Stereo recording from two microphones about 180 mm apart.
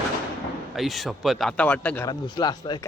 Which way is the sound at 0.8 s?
Centre (ahead or behind).